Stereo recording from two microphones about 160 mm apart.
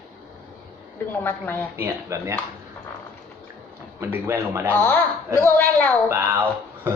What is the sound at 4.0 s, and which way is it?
Speech, 15° right (ahead or behind).